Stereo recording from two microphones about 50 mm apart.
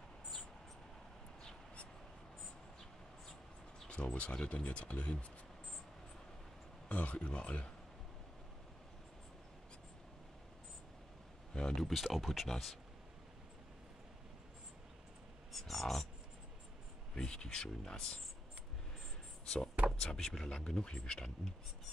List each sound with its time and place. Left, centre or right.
3.9 s speech: left
6.9 s speech: left
11.5 s a sound: centre
11.9 s speech: centre
15.5 s speech: centre
17.1 s speech: centre
19.4 s speech: centre